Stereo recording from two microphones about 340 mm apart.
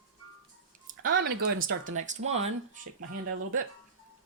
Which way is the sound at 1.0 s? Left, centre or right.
Right.